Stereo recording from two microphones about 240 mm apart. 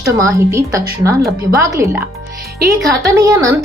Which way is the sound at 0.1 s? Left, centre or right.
Centre.